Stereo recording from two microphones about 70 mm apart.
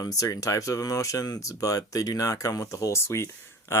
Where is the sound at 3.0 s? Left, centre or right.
Left.